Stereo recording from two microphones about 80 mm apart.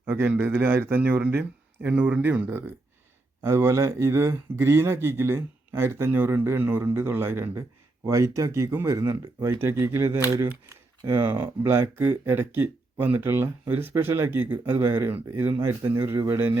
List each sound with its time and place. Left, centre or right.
0.0 s speech: right
9.6 s speech: right
11.2 s speech: right